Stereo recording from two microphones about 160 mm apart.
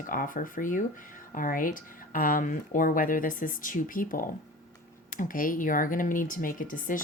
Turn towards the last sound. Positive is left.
turn(degrees=55)  # may be behind; listen again after turning